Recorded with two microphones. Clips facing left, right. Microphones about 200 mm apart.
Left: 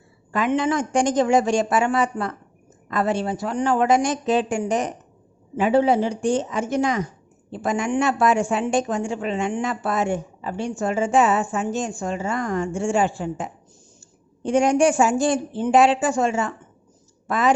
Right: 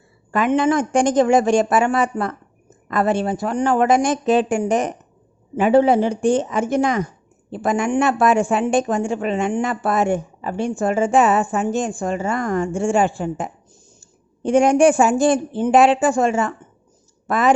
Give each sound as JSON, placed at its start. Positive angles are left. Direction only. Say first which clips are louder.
{"t": 0.3, "sound": "a woman's voice", "louder": "right 4 dB", "side_deg": -55}